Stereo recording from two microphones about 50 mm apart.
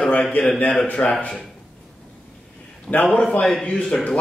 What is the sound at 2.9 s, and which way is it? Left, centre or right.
A man's voice, centre.